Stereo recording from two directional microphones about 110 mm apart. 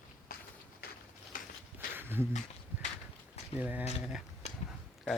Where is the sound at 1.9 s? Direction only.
20° right (ahead or behind).